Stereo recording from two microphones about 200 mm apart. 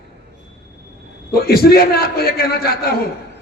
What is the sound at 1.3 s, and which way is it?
A man's voice, 50° left (ahead or behind).